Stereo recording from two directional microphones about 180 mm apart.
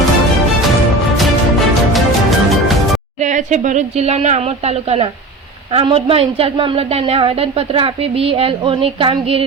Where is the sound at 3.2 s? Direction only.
40° right (ahead or behind).